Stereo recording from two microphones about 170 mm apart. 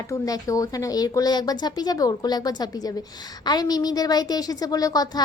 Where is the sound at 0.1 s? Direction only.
20° left (ahead or behind).